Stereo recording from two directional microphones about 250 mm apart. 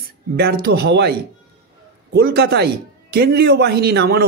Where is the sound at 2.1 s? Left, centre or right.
Right.